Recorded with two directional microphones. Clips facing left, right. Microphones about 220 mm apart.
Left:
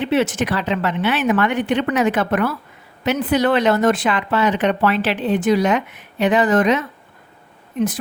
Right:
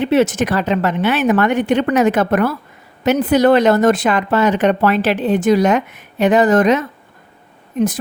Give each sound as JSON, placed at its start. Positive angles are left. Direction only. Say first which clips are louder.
{"t": 0.0, "sound": "speech", "louder": "right 4 dB", "side_deg": -45}